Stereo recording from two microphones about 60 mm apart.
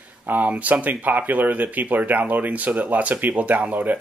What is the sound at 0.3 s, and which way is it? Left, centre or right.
Speech, right.